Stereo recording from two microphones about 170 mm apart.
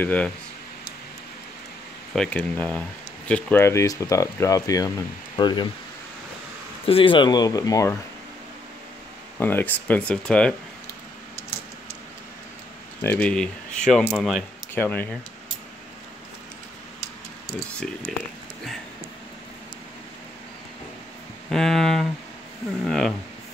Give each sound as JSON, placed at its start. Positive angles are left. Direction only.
{"t": 0.0, "sound": "speech", "side_deg": 10}
{"t": 2.1, "sound": "speech", "side_deg": 10}
{"t": 6.9, "sound": "speech", "side_deg": 30}
{"t": 9.4, "sound": "speech", "side_deg": 10}
{"t": 13.0, "sound": "speech", "side_deg": 10}
{"t": 18.1, "sound": "speech", "side_deg": 5}
{"t": 21.5, "sound": "speech", "side_deg": 0}